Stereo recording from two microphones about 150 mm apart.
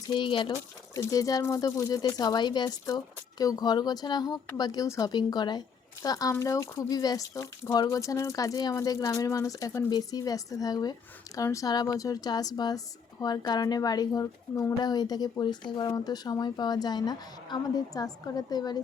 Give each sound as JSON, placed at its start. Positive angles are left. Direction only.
{"t": 0.1, "sound": "speech", "side_deg": 35}
{"t": 0.5, "sound": "speech", "side_deg": 20}